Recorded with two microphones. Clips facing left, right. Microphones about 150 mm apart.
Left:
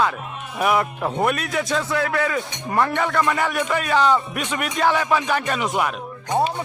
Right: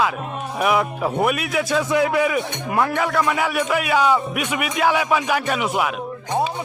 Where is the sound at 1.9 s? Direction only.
15° right (ahead or behind).